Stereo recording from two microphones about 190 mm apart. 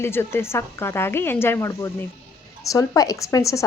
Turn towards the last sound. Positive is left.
turn(degrees=15)  # may be behind; listen again after turning